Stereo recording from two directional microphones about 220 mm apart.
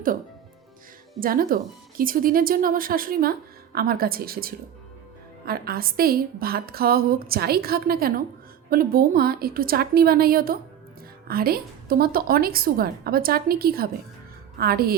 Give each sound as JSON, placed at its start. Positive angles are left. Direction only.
{"t": 1.2, "sound": "a woman's voice", "side_deg": -40}